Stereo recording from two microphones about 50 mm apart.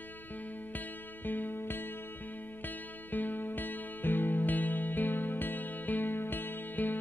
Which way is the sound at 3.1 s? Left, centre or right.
Left.